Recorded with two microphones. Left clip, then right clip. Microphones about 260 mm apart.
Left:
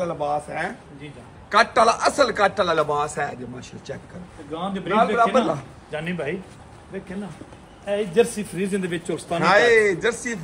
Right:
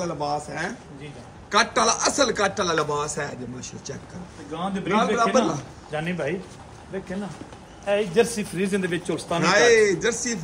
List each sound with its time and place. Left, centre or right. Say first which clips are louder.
0.0 s speech: left 3 dB; centre
5.9 s a man's voice: even; right
7.8 s a man's voice: left 1 dB; right
9.4 s speech: left 1 dB; centre